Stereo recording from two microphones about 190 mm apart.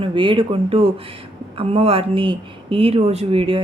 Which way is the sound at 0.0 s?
25° right (ahead or behind).